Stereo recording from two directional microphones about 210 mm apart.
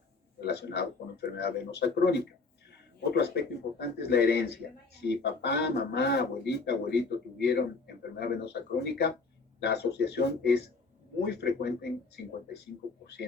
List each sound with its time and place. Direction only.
0.3 s speech: 50° left (ahead or behind)